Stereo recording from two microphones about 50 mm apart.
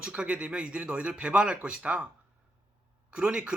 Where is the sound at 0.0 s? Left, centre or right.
Right.